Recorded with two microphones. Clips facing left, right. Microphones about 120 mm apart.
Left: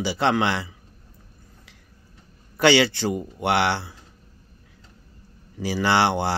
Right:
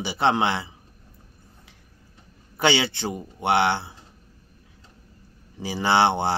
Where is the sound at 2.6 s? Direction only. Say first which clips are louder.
Left 4 dB; 20° right (ahead or behind).